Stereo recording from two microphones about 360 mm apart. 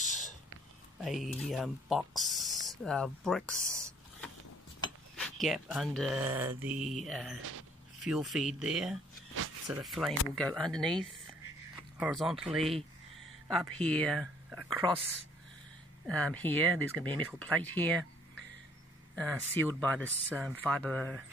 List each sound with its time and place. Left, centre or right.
0.0 s a sound: left
1.0 s speech: centre
14.8 s speech: centre
16.1 s speech: centre
17.0 s speech: centre
17.4 s speech: centre